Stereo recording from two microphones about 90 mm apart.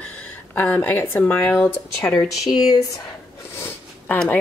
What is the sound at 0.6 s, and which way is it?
Speech, 20° left (ahead or behind).